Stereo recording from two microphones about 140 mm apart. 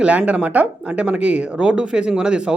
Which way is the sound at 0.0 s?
10° right (ahead or behind).